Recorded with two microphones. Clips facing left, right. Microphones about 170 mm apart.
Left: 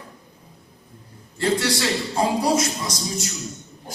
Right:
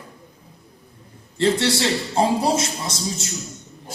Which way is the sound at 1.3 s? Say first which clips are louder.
Right 3 dB; 25° right (ahead or behind).